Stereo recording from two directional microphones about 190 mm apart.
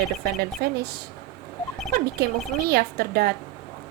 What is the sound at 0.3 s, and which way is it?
Speech, 55° right (ahead or behind).